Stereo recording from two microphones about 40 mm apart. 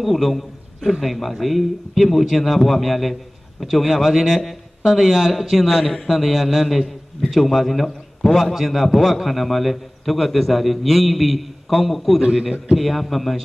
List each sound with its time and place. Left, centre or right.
0.0 s a man's voice: centre
12.2 s a man's voice: right
12.7 s a man's voice: centre